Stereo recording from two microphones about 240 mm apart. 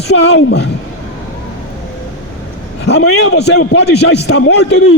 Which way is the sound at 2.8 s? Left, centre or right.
Left.